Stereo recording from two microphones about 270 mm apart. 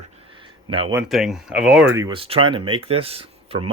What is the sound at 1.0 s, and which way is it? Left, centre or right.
Speech, centre.